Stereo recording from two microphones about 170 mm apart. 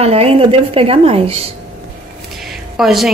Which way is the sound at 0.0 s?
35° right (ahead or behind).